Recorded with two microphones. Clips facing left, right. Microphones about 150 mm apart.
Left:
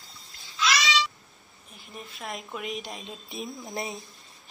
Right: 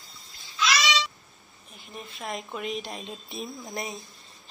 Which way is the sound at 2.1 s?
5° left (ahead or behind).